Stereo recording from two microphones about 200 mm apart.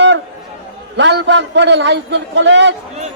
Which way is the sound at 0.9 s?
60° right (ahead or behind).